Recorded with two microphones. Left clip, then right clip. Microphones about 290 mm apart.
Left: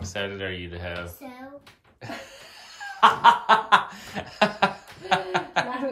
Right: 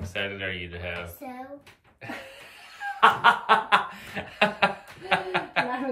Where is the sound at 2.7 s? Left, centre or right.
Centre.